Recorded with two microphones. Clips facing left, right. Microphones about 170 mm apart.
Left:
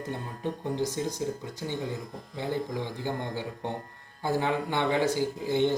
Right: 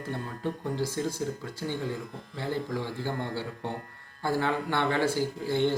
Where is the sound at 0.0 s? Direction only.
20° left (ahead or behind).